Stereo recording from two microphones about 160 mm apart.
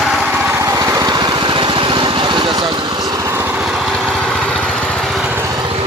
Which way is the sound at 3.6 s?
Centre (ahead or behind).